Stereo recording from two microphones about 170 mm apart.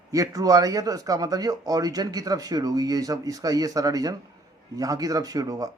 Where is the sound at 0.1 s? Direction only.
20° right (ahead or behind).